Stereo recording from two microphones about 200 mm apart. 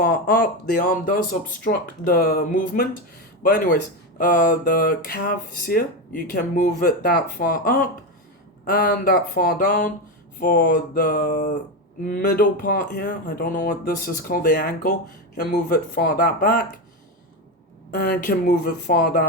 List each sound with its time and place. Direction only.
0.0 s speech: 50° left (ahead or behind)
17.9 s speech: 50° left (ahead or behind)